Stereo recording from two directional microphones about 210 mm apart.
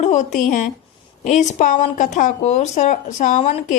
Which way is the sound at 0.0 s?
35° left (ahead or behind).